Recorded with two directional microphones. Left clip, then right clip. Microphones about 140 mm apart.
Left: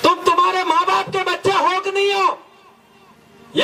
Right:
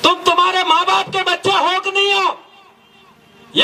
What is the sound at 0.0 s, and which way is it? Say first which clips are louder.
Music: right 1 dB; 20° right (ahead or behind).